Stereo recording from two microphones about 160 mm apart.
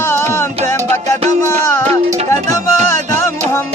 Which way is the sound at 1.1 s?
45° right (ahead or behind).